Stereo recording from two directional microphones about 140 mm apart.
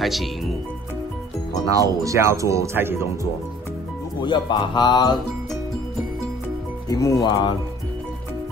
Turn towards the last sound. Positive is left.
turn(degrees=30)  # may be behind; listen again after turning